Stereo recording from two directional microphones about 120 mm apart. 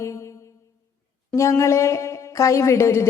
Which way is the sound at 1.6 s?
25° left (ahead or behind).